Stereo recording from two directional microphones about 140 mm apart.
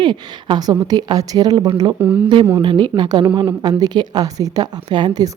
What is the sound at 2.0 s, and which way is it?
Speech, 10° right (ahead or behind).